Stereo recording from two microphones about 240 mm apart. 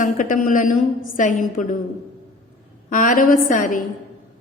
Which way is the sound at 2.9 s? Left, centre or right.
Left.